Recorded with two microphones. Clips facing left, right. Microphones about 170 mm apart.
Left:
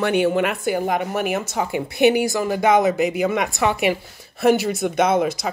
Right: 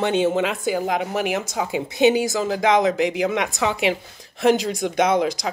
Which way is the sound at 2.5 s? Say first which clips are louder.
Left 2 dB; 5° left (ahead or behind).